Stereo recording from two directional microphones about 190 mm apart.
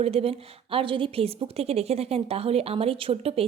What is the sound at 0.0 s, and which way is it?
A woman's voice, 30° right (ahead or behind).